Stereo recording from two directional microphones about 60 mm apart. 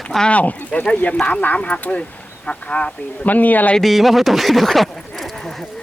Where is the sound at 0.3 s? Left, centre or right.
Left.